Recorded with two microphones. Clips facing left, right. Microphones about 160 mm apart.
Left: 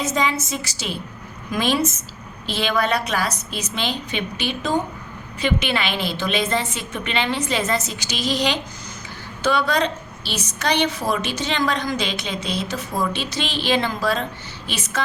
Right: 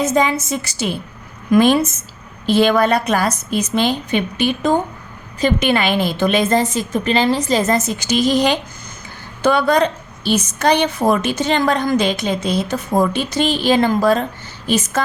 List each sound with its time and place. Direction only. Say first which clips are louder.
0.0 s a woman's voice: right 6 dB; 50° right (ahead or behind)